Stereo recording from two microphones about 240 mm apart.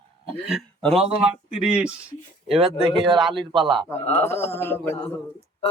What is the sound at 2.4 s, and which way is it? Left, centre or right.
Speech, right.